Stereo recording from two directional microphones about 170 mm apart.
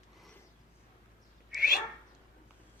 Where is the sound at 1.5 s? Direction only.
5° right (ahead or behind).